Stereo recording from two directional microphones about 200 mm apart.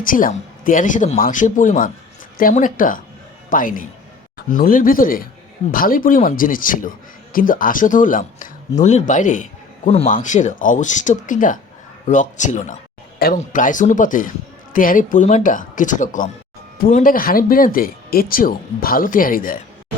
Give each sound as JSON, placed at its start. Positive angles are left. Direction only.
{"t": 0.0, "sound": "speech", "side_deg": 45}